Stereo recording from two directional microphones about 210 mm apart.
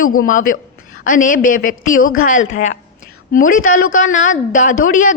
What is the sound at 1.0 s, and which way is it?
Speech, 40° left (ahead or behind).